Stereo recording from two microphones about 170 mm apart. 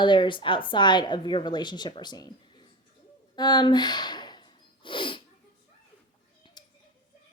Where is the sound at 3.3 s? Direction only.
25° left (ahead or behind).